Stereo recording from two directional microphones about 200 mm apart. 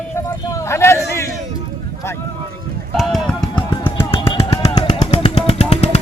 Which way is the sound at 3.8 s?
10° left (ahead or behind).